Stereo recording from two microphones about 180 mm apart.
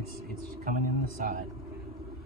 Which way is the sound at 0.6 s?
50° right (ahead or behind).